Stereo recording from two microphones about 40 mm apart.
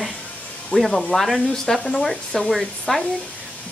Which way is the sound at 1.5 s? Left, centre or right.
Centre.